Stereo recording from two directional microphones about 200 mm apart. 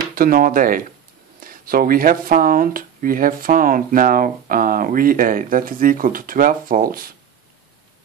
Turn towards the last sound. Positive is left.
turn(degrees=-45)  # may be behind; listen again after turning